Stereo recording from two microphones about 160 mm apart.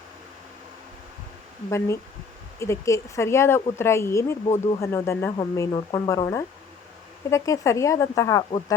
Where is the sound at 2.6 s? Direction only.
20° left (ahead or behind).